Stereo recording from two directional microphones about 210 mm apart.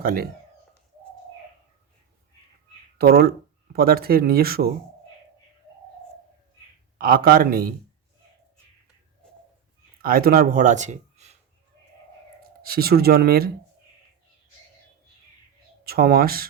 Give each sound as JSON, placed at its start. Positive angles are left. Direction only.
{"t": 0.0, "sound": "speech", "side_deg": -45}
{"t": 3.0, "sound": "speech", "side_deg": -45}
{"t": 7.0, "sound": "speech", "side_deg": -45}
{"t": 10.0, "sound": "speech", "side_deg": -45}
{"t": 12.4, "sound": "speech", "side_deg": -45}
{"t": 15.8, "sound": "speech", "side_deg": -45}